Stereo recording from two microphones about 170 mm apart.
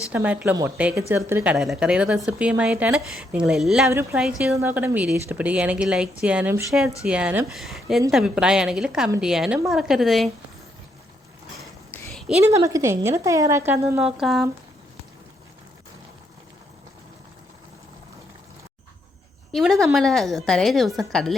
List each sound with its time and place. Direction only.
0.1 s a woman's voice: 10° right (ahead or behind)
1.5 s a woman's voice: 5° right (ahead or behind)
12.1 s a sound: centre (ahead or behind)
12.5 s a woman's voice: 20° right (ahead or behind)
14.2 s a woman's voice: centre (ahead or behind)
19.5 s a woman's voice: centre (ahead or behind)